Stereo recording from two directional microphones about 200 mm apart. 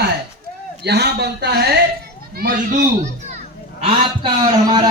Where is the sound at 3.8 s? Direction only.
25° right (ahead or behind).